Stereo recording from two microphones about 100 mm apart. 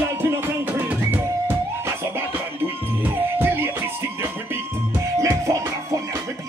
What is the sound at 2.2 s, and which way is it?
Music, 20° right (ahead or behind).